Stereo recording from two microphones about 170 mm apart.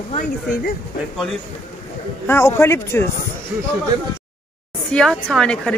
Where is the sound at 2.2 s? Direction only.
15° left (ahead or behind).